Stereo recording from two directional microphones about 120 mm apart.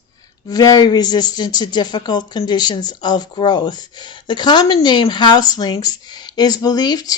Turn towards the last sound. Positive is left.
turn(degrees=35)  # may be behind; listen again after turning